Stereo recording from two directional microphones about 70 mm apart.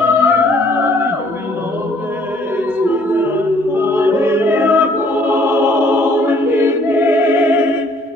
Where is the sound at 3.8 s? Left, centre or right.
Right.